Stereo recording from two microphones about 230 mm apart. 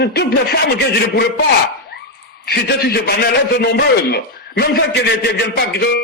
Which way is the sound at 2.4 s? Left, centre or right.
Left.